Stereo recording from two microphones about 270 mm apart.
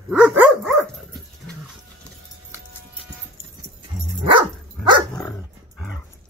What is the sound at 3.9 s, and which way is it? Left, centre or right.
Dog, centre.